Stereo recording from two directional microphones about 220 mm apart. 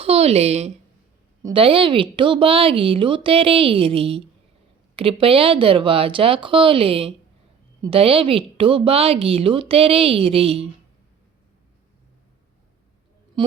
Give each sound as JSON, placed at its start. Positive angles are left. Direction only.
{"t": 0.0, "sound": "a woman's voice", "side_deg": -25}